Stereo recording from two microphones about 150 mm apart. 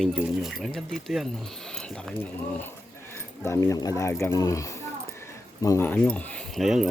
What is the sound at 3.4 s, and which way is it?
Speech, 20° left (ahead or behind).